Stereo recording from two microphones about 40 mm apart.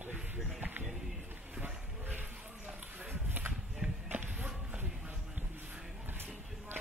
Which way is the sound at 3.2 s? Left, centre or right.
Right.